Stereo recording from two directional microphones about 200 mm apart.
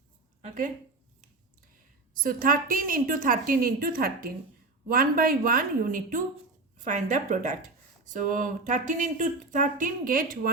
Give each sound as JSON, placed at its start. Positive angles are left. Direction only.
{"t": 0.4, "sound": "speech", "side_deg": -40}
{"t": 2.1, "sound": "a woman's voice", "side_deg": -45}